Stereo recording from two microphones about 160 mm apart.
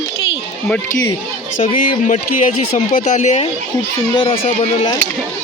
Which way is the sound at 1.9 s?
55° left (ahead or behind).